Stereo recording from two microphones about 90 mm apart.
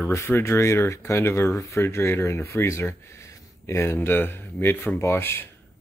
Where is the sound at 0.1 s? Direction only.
30° left (ahead or behind).